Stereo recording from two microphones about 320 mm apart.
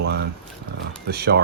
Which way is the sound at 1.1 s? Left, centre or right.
Right.